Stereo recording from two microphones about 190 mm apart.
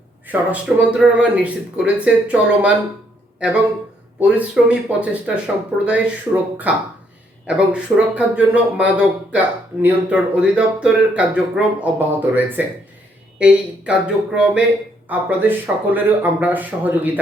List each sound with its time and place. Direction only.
0.3 s speech: 5° right (ahead or behind)
4.2 s speech: 5° right (ahead or behind)